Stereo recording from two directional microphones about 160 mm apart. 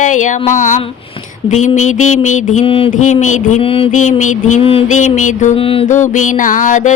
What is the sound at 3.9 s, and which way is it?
Music, 50° left (ahead or behind).